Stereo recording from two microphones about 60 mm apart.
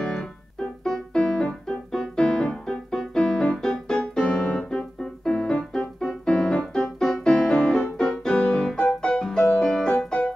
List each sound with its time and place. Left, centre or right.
0.0 s keyboard: centre
8.0 s music: centre
8.7 s piano: centre
9.6 s music: centre